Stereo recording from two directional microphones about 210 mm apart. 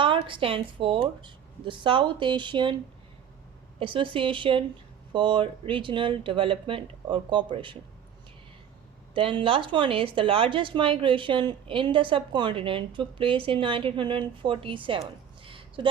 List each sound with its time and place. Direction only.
0.0 s a woman's voice: 25° right (ahead or behind)
3.8 s a woman's voice: 25° right (ahead or behind)
9.1 s a woman's voice: 25° right (ahead or behind)
15.4 s a sound: 25° right (ahead or behind)